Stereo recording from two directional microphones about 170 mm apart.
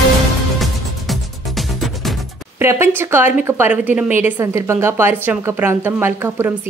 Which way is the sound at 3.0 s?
15° right (ahead or behind).